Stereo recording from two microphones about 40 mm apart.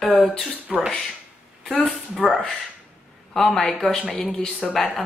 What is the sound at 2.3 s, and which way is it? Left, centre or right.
A woman's voice, centre.